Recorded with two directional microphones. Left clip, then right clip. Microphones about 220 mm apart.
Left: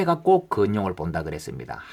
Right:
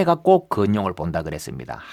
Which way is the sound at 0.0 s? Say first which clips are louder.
Right 3 dB; 45° right (ahead or behind).